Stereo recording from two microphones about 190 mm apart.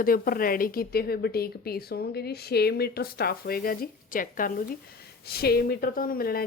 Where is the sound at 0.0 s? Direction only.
50° left (ahead or behind).